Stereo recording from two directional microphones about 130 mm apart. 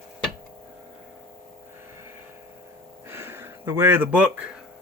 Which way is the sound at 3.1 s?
15° right (ahead or behind).